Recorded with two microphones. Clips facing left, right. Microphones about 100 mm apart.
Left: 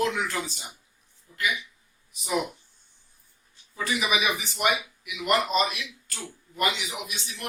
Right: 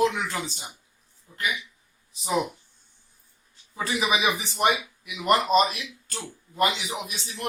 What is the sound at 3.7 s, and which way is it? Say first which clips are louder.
A man's voice: right 2 dB; 30° right (ahead or behind).